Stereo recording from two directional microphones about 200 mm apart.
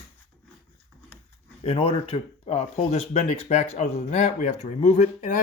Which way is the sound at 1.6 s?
25° left (ahead or behind).